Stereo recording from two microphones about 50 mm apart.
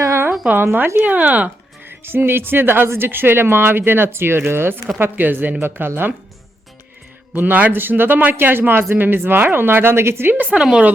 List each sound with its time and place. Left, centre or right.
0.5 s speech: right
0.9 s speech: right
1.9 s speech: right
7.3 s speech: right
10.3 s speech: right